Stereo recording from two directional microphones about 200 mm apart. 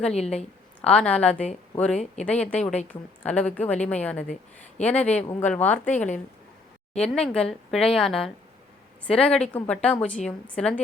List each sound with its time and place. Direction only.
0.1 s a woman's voice: 30° left (ahead or behind)
0.8 s a woman's voice: 5° left (ahead or behind)
7.0 s a woman's voice: 5° left (ahead or behind)